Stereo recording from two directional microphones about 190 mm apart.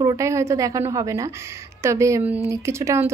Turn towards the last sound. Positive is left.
turn(degrees=-15)  # may be behind; listen again after turning